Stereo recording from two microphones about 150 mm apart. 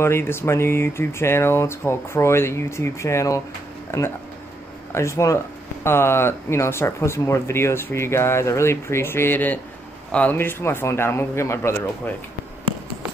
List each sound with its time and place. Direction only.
0.0 s speech: 15° left (ahead or behind)